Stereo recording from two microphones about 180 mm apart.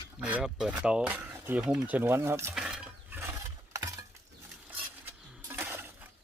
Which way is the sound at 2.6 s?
5° right (ahead or behind).